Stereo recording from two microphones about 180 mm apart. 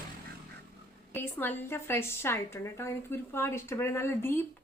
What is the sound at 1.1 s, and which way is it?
A woman's voice, 10° left (ahead or behind).